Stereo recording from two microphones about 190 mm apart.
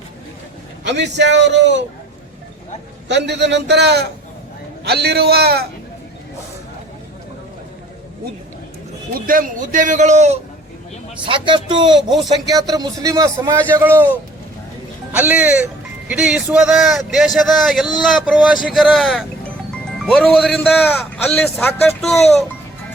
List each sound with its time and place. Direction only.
0.9 s speech: 65° right (ahead or behind)
3.1 s a man's voice: 65° right (ahead or behind)
9.1 s a man's voice: 50° right (ahead or behind)
11.3 s a man's voice: 25° right (ahead or behind)
11.9 s a man's voice: centre (ahead or behind)
12.5 s a man's voice: 20° right (ahead or behind); by 22.4 s centre (ahead or behind)